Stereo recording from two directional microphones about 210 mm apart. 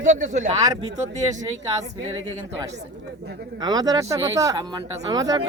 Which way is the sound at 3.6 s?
20° right (ahead or behind).